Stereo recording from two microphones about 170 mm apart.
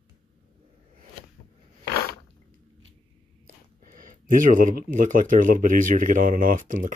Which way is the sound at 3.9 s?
50° right (ahead or behind).